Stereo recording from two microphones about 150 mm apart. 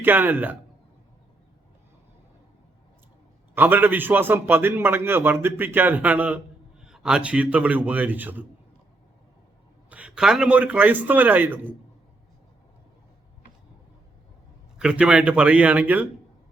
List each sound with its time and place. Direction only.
0.0 s a man's voice: 15° right (ahead or behind)
3.5 s a man's voice: 15° right (ahead or behind)
9.9 s a man's voice: 5° right (ahead or behind)
14.8 s a man's voice: 5° right (ahead or behind)